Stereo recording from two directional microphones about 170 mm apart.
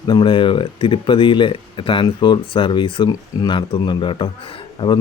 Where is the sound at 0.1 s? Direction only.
30° left (ahead or behind).